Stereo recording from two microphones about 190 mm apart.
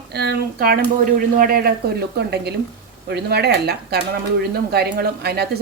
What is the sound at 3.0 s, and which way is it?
A woman's voice, 60° right (ahead or behind).